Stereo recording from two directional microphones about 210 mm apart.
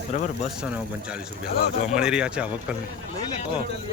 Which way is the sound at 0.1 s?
35° left (ahead or behind).